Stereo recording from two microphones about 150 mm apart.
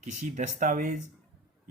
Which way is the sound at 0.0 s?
55° right (ahead or behind).